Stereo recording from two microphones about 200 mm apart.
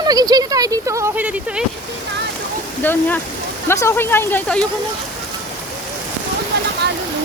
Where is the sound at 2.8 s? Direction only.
10° left (ahead or behind).